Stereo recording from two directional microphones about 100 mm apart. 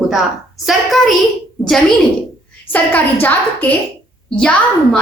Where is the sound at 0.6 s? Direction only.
Centre (ahead or behind).